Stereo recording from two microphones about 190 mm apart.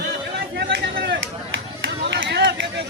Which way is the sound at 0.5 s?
65° right (ahead or behind).